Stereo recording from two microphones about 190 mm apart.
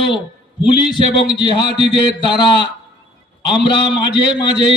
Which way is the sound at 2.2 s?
25° left (ahead or behind).